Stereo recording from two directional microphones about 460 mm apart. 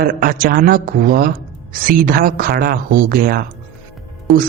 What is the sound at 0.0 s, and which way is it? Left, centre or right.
Speech, centre.